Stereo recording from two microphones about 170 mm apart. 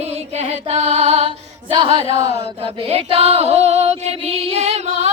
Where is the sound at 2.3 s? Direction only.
35° right (ahead or behind).